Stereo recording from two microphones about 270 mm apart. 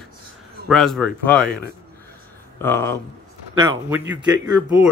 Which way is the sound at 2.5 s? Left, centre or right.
Centre.